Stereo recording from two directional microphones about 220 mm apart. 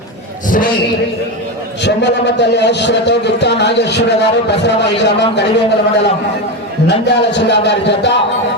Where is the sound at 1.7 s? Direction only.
50° left (ahead or behind).